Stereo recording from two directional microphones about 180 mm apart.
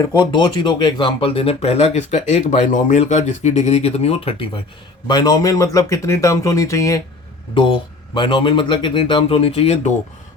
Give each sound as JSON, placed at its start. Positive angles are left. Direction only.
{"t": 0.2, "sound": "speech", "side_deg": 25}